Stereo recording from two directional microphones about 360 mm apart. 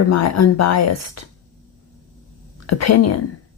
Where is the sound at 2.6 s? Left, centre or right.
Left.